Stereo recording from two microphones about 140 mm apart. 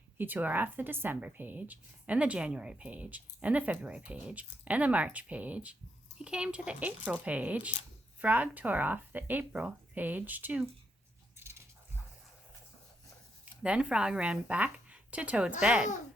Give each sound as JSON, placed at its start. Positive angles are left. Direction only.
{"t": 0.2, "sound": "a woman's voice", "side_deg": -15}
{"t": 11.3, "sound": "biting", "side_deg": -15}
{"t": 13.4, "sound": "a woman's voice", "side_deg": -10}